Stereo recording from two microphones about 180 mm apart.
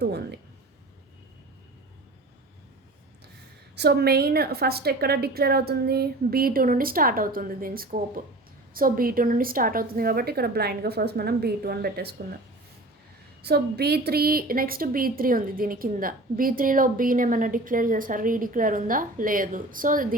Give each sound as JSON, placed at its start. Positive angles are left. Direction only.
{"t": 0.0, "sound": "a sound", "side_deg": -65}
{"t": 3.8, "sound": "a woman's voice", "side_deg": -60}
{"t": 13.4, "sound": "a woman's voice", "side_deg": -65}